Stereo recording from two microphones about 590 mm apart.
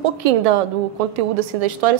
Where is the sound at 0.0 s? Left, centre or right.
Right.